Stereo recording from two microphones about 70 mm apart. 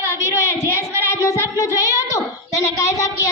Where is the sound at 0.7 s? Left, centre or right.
Left.